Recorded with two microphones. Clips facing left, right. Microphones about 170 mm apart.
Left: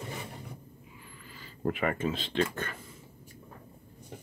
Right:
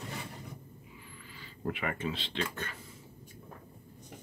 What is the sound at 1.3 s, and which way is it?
Speech, 45° left (ahead or behind).